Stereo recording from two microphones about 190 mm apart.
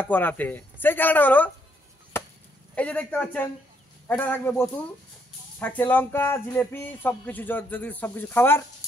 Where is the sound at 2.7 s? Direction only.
5° left (ahead or behind).